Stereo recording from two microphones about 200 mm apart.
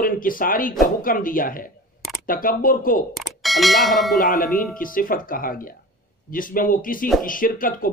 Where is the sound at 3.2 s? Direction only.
Centre (ahead or behind).